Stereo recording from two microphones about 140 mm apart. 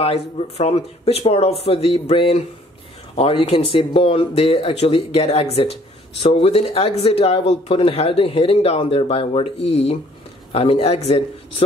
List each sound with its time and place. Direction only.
0.0 s speech: 45° left (ahead or behind)